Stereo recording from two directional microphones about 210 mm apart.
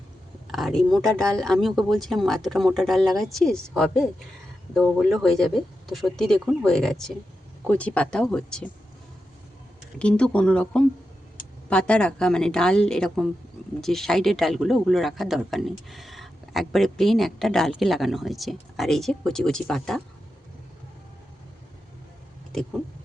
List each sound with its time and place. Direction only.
0.5 s speech: centre (ahead or behind)
10.0 s speech: 5° left (ahead or behind)